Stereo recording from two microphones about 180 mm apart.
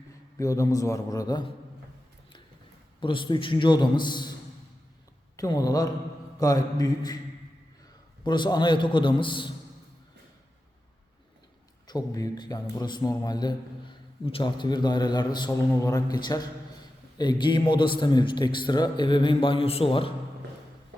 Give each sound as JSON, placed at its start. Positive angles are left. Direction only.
{"t": 0.3, "sound": "a man's voice", "side_deg": 15}
{"t": 3.0, "sound": "a man's voice", "side_deg": 25}
{"t": 5.4, "sound": "a man's voice", "side_deg": 20}
{"t": 8.2, "sound": "a man's voice", "side_deg": 25}
{"t": 11.9, "sound": "a man's voice", "side_deg": 20}